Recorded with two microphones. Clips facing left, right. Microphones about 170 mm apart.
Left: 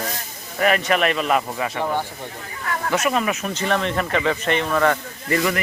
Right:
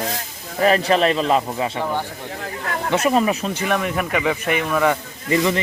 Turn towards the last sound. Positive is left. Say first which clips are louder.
# right 2 dB
turn(degrees=-20)  # may be behind; listen again after turning